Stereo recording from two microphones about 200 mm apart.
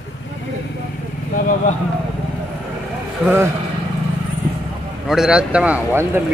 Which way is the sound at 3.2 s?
10° right (ahead or behind).